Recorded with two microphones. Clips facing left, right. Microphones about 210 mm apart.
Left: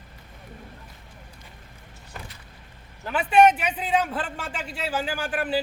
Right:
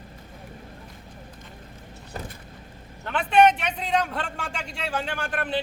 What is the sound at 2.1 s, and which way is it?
Vehicle, 40° right (ahead or behind).